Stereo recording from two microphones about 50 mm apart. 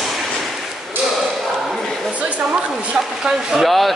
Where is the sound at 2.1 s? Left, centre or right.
Right.